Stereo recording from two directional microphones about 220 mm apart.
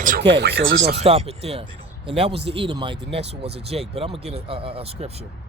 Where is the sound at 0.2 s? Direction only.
50° right (ahead or behind).